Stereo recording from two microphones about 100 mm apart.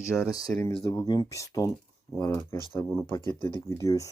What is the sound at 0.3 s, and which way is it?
Speech, 40° left (ahead or behind).